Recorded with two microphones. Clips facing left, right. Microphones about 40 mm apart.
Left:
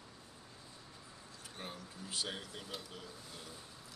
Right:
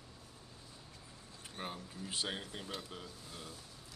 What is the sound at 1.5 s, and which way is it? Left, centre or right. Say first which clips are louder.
Speech: right 4 dB; right.